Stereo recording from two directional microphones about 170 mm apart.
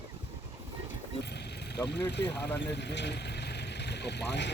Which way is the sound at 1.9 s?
85° left.